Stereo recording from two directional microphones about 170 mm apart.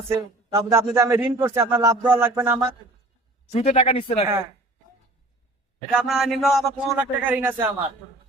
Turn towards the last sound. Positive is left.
turn(degrees=-10)  # may be behind; listen again after turning